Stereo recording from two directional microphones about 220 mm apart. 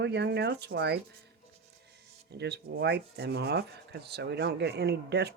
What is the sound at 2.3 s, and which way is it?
Speech, 50° right (ahead or behind).